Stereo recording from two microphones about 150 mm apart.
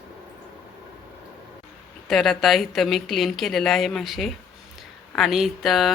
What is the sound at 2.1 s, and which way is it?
A woman's voice, centre (ahead or behind).